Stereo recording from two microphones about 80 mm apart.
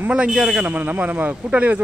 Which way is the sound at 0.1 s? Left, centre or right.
Centre.